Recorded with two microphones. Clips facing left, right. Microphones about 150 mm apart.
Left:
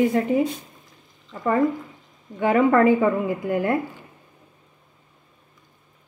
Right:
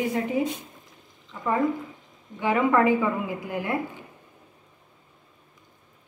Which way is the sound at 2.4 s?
50° left (ahead or behind).